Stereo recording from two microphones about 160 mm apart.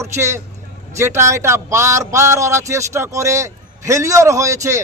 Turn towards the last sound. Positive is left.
turn(degrees=-20)  # may be behind; listen again after turning